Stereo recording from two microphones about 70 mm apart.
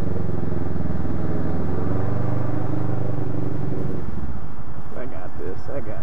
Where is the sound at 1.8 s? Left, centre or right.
Right.